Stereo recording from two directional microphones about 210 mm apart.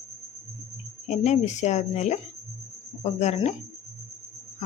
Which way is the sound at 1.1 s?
35° left (ahead or behind).